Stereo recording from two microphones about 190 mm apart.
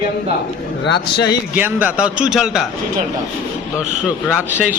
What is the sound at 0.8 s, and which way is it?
Speech, 65° left (ahead or behind).